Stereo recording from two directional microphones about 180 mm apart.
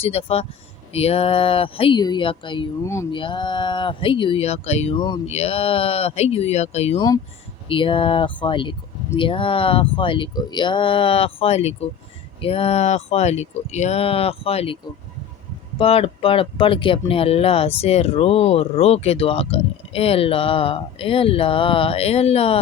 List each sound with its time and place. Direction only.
0.0 s speech: 35° left (ahead or behind)
2.8 s a sound: 15° left (ahead or behind)
3.1 s speech: 30° left (ahead or behind)
15.8 s speech: 30° left (ahead or behind)